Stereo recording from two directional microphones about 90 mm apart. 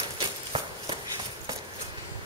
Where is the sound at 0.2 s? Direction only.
90° right.